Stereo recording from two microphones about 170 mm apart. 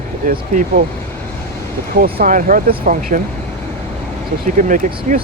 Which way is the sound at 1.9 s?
55° right (ahead or behind).